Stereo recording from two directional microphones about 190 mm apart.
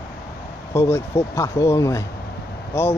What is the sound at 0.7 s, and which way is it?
Speech, 15° left (ahead or behind).